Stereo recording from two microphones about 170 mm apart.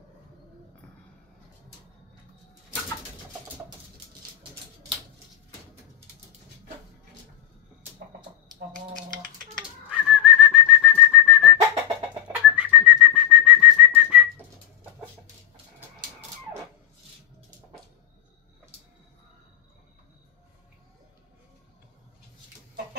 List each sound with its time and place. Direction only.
9.6 s whistling: 5° right (ahead or behind)